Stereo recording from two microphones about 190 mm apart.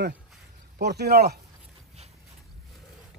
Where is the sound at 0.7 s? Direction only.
55° right (ahead or behind).